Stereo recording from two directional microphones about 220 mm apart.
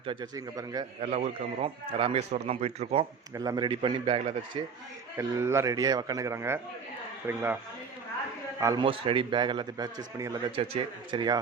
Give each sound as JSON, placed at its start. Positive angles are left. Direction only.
{"t": 0.0, "sound": "a man's voice", "side_deg": -20}
{"t": 1.0, "sound": "a man's voice", "side_deg": -30}
{"t": 3.3, "sound": "a man's voice", "side_deg": -15}
{"t": 5.1, "sound": "a man's voice", "side_deg": -10}
{"t": 8.6, "sound": "a man's voice", "side_deg": -20}